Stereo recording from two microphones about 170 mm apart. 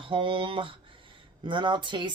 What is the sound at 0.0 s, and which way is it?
Speech, 30° right (ahead or behind).